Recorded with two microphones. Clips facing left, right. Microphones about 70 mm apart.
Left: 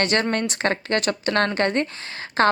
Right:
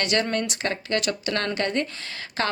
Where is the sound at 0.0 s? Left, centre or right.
Left.